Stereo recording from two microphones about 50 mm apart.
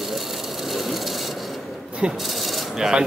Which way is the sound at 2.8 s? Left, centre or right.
Centre.